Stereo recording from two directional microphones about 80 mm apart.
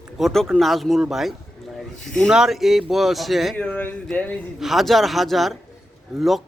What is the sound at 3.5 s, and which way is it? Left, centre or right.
Speech, centre.